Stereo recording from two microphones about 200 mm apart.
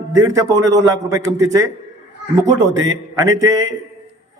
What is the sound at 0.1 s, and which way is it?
A man's voice, 15° right (ahead or behind).